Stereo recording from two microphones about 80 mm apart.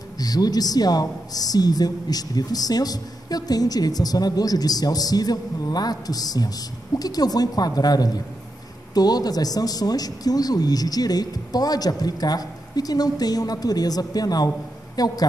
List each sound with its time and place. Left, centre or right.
0.2 s speech: left